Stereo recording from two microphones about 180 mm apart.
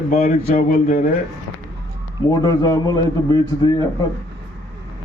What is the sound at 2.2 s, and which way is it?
A man's voice, 20° left (ahead or behind).